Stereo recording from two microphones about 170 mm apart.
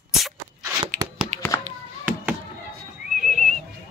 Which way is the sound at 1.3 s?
45° right (ahead or behind).